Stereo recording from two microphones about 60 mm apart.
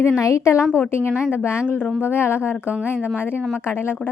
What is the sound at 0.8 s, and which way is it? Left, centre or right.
Speech, left.